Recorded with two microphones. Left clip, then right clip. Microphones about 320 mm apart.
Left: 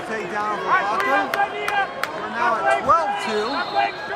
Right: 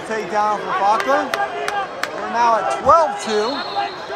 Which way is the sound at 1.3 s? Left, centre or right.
Right.